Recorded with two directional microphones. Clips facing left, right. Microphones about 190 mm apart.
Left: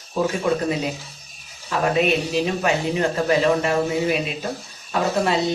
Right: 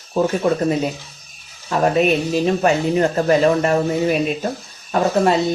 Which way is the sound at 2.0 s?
45° right (ahead or behind).